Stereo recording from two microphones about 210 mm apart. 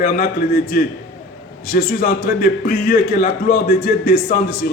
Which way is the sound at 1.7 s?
45° left (ahead or behind).